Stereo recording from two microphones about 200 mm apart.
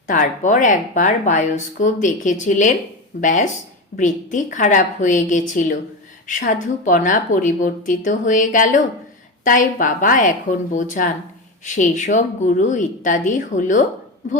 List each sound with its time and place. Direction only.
0.1 s speech: 40° left (ahead or behind)